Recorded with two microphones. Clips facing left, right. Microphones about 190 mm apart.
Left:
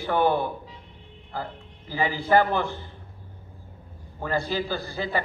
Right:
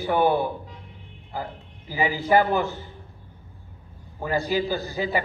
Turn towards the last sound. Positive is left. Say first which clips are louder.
# right 3 dB
turn(degrees=-15)  # may be behind; listen again after turning